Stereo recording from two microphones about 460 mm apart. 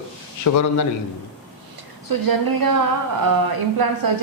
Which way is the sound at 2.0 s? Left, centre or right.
Right.